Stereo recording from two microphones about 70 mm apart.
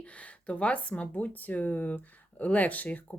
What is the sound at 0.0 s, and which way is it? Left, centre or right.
Speech, centre.